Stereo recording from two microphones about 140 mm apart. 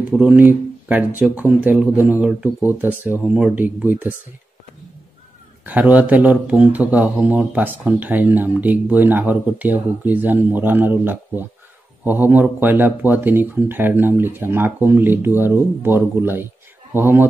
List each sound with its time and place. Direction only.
0.1 s speech: 10° right (ahead or behind)
5.7 s speech: 10° right (ahead or behind)